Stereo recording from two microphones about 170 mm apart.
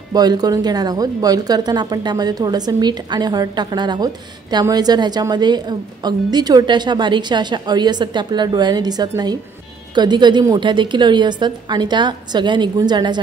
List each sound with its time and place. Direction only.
0.1 s a woman's voice: 25° right (ahead or behind)